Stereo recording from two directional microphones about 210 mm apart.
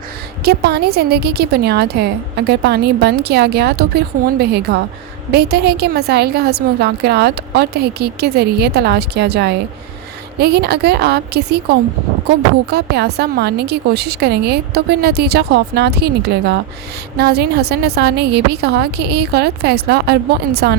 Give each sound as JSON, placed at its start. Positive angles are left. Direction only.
{"t": 0.4, "sound": "a woman's voice", "side_deg": -50}